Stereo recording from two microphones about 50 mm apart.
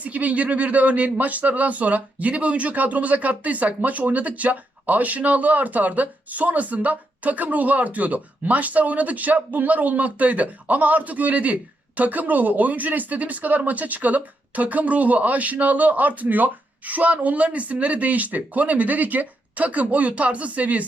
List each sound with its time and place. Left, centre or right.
0.0 s speech: right